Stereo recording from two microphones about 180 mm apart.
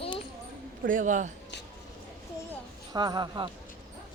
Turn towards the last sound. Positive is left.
turn(degrees=-25)  # may be behind; listen again after turning